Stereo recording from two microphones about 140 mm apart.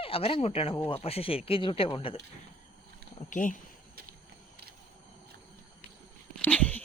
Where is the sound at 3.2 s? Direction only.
70° left (ahead or behind).